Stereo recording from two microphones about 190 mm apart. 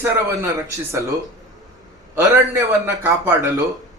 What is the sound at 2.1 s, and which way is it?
A man's voice, 15° right (ahead or behind).